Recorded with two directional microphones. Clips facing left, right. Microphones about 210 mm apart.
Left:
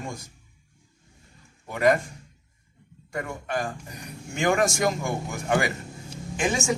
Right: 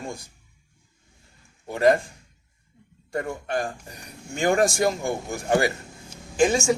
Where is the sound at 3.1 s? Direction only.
35° right (ahead or behind).